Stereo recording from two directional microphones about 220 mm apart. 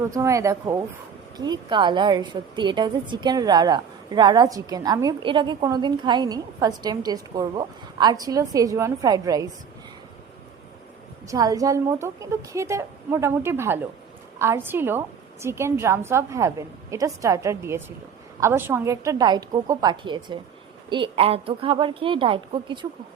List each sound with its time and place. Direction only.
0.1 s a woman's voice: 15° right (ahead or behind)
11.3 s a woman's voice: 15° right (ahead or behind)